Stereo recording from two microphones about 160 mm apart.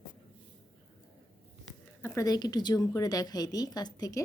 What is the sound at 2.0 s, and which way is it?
A woman's voice, 15° left (ahead or behind).